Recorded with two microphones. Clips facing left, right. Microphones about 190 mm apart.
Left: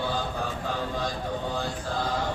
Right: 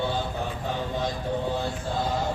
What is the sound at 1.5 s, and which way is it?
Mantra, 25° right (ahead or behind).